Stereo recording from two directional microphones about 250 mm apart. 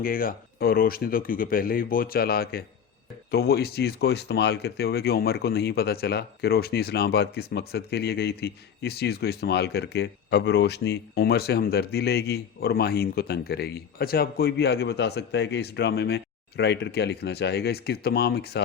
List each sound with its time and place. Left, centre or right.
0.0 s speech: left